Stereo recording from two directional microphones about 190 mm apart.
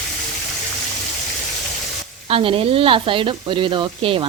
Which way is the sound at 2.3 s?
30° right (ahead or behind).